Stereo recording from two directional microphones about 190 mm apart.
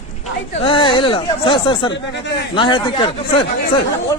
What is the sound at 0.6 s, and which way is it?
Speech, 25° left (ahead or behind).